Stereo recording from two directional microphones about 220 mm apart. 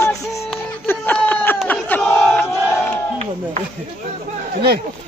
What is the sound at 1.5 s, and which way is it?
Crowd, 5° left (ahead or behind).